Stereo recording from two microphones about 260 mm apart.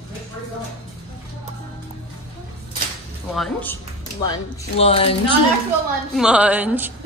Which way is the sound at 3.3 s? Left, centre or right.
Centre.